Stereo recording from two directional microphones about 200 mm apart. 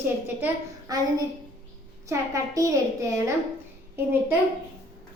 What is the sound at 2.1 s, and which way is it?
A woman's voice, 15° right (ahead or behind).